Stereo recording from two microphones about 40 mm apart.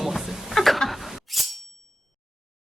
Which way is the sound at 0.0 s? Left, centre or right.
Centre.